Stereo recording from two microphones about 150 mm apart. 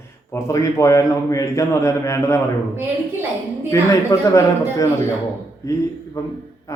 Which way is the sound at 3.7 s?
20° left (ahead or behind).